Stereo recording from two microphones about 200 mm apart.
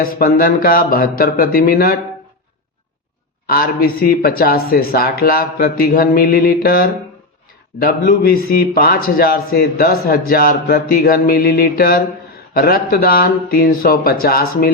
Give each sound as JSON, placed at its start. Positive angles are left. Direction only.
{"t": 0.0, "sound": "a man's voice", "side_deg": 45}
{"t": 3.4, "sound": "a man's voice", "side_deg": 50}